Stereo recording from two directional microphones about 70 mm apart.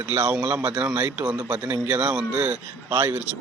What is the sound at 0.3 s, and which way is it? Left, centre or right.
A man's voice, right.